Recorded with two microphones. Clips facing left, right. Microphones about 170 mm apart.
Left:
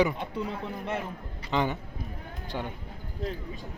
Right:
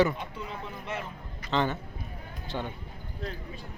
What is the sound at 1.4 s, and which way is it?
Speech, 15° left (ahead or behind).